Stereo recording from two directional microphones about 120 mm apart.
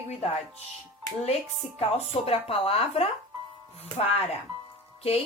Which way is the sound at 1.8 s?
55° left (ahead or behind).